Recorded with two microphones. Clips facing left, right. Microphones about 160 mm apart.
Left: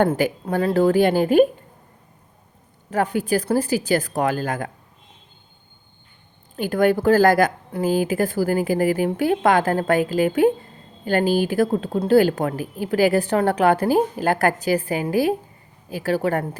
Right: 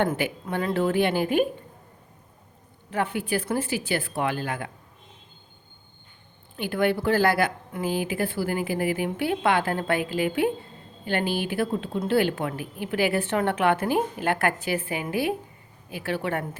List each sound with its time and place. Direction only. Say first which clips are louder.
0.0 s a woman's voice: left 6 dB; 35° left (ahead or behind)
2.9 s a woman's voice: left 6 dB; 40° left (ahead or behind)
6.6 s a woman's voice: left 6 dB; 40° left (ahead or behind)